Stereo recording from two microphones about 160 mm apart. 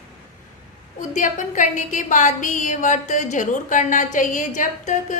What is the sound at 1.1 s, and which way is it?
A woman's voice, 50° left (ahead or behind).